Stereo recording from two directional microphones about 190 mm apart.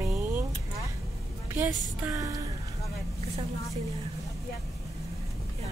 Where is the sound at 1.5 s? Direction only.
10° right (ahead or behind).